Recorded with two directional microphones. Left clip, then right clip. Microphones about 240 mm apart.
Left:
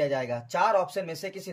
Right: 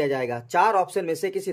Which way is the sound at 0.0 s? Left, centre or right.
Centre.